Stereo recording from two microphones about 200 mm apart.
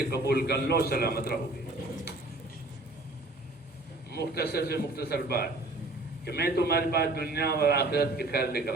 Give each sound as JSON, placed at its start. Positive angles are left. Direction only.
{"t": 0.1, "sound": "a man's voice", "side_deg": 55}
{"t": 4.1, "sound": "a man's voice", "side_deg": 50}